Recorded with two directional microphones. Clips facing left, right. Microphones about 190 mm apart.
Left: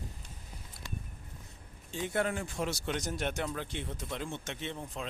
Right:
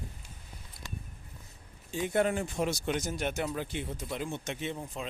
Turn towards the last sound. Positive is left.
turn(degrees=-10)  # may be behind; listen again after turning